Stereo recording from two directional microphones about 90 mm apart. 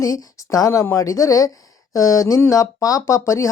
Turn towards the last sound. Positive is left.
turn(degrees=35)  # may be behind; listen again after turning